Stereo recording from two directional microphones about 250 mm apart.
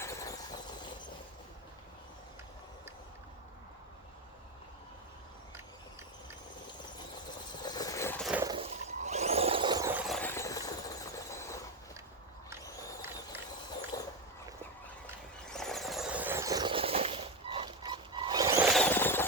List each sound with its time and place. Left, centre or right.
0.0 s squeal: centre
7.6 s vehicle: centre
8.3 s water: centre
8.5 s a sound: right; by 11.6 s centre
13.9 s dog: centre
15.4 s vehicle: centre
18.7 s vehicle: centre